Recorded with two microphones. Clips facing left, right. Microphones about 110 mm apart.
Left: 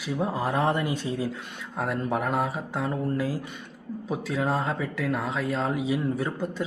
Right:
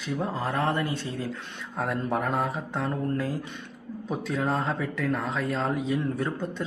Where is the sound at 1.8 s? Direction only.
Centre (ahead or behind).